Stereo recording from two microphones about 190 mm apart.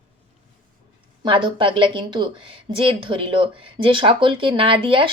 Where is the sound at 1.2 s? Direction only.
25° right (ahead or behind).